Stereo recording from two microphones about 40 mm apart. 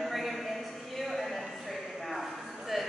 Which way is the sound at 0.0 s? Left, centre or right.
Centre.